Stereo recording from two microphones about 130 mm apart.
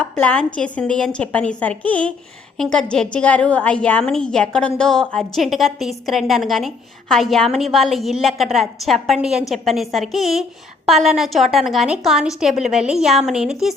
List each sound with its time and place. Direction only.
0.0 s a woman's voice: 10° left (ahead or behind)